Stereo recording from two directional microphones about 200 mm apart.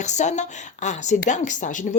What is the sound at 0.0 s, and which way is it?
Speech, 35° left (ahead or behind).